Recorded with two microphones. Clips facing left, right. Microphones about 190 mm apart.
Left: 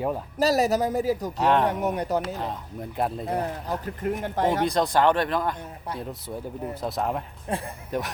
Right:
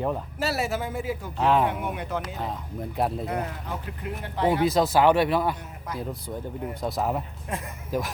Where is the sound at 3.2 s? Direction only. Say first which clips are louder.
Left 2 dB; 35° left (ahead or behind).